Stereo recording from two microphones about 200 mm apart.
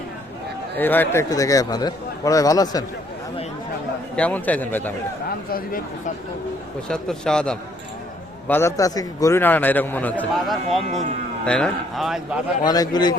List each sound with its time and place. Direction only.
0.8 s a man's voice: 10° left (ahead or behind)
4.1 s a man's voice: 5° left (ahead or behind)
5.5 s speech: 45° left (ahead or behind)
6.8 s a man's voice: 5° left (ahead or behind)
12.6 s a man's voice: 20° left (ahead or behind)